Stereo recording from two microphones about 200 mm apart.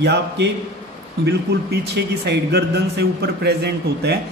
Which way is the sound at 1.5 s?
55° right (ahead or behind).